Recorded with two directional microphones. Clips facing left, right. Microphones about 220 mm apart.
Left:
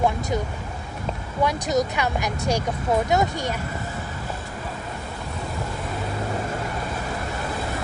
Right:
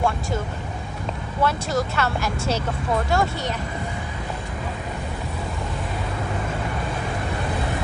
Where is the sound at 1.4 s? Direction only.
15° left (ahead or behind).